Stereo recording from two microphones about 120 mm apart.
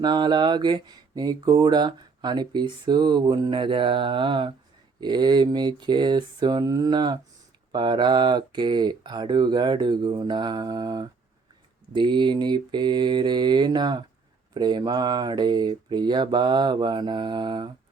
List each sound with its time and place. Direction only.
0.0 s speech: 35° right (ahead or behind)